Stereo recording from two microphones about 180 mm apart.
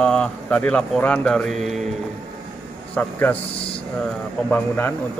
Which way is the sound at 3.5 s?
30° left (ahead or behind).